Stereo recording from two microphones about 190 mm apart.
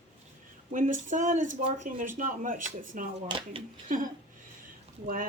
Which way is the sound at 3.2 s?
25° right (ahead or behind).